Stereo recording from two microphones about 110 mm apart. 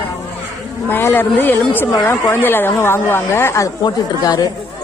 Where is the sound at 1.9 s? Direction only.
25° left (ahead or behind).